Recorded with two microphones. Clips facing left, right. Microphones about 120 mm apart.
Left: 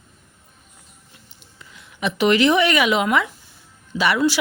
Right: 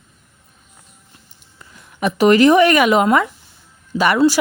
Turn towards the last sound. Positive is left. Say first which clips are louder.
# right 4 dB
turn(degrees=-35)  # may be behind; listen again after turning